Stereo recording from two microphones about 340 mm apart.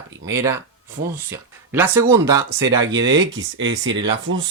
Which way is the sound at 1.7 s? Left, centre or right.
Centre.